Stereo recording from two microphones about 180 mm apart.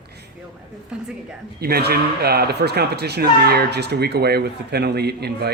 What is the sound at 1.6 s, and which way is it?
Speech, 60° right (ahead or behind).